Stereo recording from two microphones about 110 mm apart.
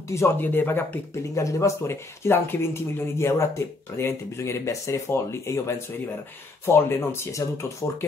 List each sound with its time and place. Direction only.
0.1 s speech: 20° left (ahead or behind)